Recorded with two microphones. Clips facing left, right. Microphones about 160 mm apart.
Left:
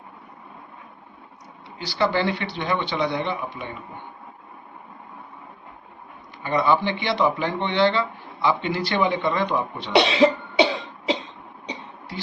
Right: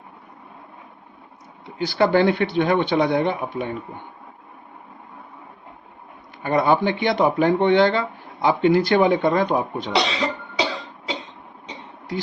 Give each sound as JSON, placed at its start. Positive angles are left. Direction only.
{"t": 1.8, "sound": "speech", "side_deg": -50}
{"t": 6.4, "sound": "speech", "side_deg": -50}
{"t": 9.9, "sound": "cough", "side_deg": 25}